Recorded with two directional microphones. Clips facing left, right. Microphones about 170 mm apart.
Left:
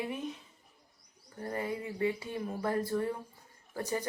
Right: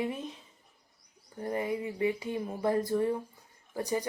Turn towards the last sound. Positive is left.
turn(degrees=-15)  # may be behind; listen again after turning